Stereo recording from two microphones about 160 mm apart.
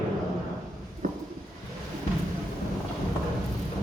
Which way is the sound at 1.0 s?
55° right (ahead or behind).